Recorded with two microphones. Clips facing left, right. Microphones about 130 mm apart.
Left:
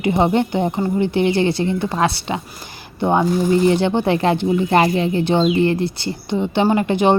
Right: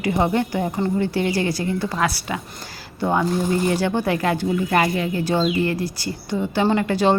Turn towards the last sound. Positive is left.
turn(degrees=20)  # may be behind; listen again after turning